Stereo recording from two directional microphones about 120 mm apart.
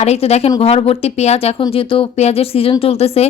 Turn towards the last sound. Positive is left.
turn(degrees=55)  # may be behind; listen again after turning